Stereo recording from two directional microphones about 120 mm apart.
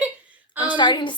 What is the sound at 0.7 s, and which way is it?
Speech, 40° left (ahead or behind).